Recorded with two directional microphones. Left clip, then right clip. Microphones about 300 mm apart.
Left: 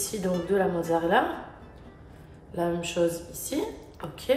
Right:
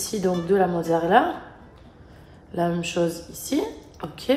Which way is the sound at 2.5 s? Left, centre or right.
Right.